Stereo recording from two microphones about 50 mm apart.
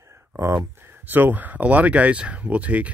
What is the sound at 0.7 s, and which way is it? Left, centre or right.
Speech, right.